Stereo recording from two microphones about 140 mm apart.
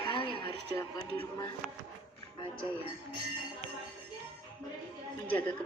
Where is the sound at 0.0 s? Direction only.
40° left (ahead or behind).